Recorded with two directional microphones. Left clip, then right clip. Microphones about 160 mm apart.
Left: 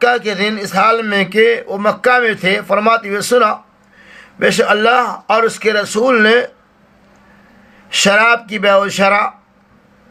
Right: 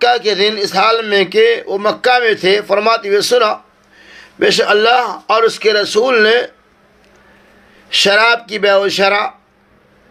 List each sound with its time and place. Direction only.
0.0 s a man's voice: 35° right (ahead or behind)
7.9 s a man's voice: 35° right (ahead or behind)